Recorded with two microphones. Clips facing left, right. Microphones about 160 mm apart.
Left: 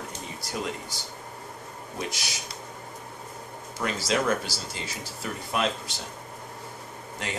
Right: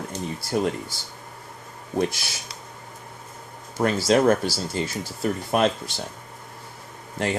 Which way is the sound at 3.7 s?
50° right (ahead or behind).